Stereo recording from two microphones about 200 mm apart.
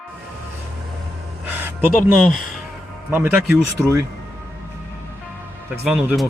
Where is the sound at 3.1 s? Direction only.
10° right (ahead or behind).